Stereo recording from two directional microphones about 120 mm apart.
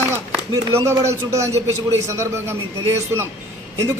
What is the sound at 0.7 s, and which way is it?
A man's voice, 20° right (ahead or behind).